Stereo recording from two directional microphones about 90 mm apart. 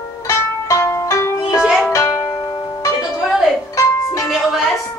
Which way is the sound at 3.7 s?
40° left (ahead or behind).